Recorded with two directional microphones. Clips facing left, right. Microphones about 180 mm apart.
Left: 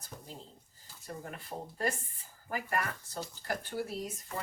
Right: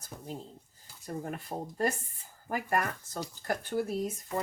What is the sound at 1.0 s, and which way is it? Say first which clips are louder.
Speech: right 6 dB; 45° right (ahead or behind).